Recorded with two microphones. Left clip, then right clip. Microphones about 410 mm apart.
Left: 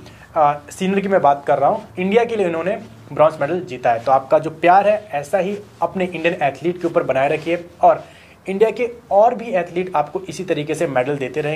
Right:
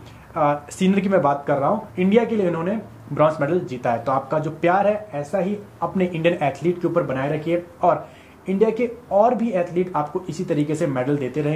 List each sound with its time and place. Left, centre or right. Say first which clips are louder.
0.3 s speech: left 4 dB; left